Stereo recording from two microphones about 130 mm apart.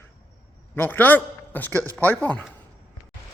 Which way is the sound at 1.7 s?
25° right (ahead or behind).